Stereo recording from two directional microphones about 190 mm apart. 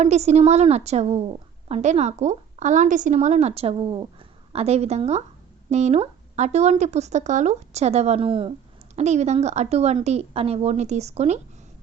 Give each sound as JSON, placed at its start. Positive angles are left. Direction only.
{"t": 0.0, "sound": "a woman's voice", "side_deg": -35}